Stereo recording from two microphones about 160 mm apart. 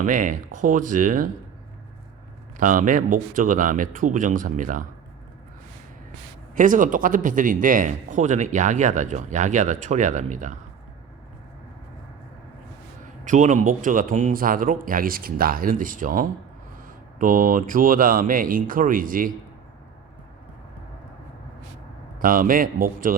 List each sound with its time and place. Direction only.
0.0 s a man's voice: 55° right (ahead or behind)
2.6 s speech: 55° right (ahead or behind)
6.5 s a man's voice: 55° right (ahead or behind)
13.2 s speech: 50° right (ahead or behind)
22.2 s speech: 60° right (ahead or behind)